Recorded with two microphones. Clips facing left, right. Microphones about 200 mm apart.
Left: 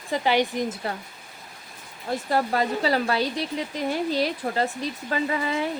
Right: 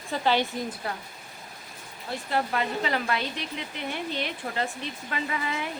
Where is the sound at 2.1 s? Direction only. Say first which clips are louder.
Left 4 dB; 40° left (ahead or behind).